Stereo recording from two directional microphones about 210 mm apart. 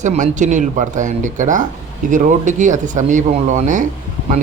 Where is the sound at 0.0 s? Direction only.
35° right (ahead or behind).